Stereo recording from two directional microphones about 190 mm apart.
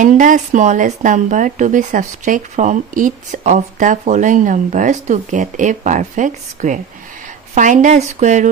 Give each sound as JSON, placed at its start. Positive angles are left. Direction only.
{"t": 0.0, "sound": "speech", "side_deg": -40}